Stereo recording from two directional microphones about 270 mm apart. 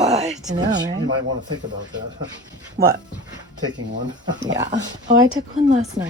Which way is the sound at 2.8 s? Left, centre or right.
Right.